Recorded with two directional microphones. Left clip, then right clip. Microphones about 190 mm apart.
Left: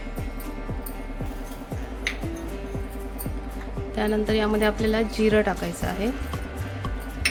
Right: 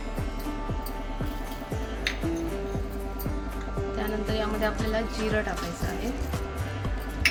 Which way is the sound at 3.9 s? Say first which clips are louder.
Left 7 dB; 55° left (ahead or behind).